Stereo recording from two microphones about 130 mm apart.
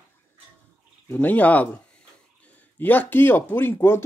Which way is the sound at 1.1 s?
15° left (ahead or behind).